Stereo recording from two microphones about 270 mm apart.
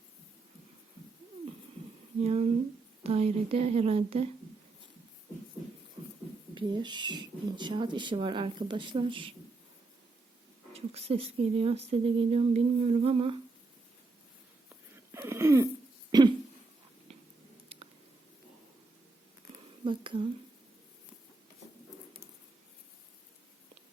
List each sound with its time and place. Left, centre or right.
2.2 s speech: right
6.0 s a sound: centre
6.5 s speech: centre
10.7 s speech: right
15.1 s throat clearing: centre
19.8 s a sound: centre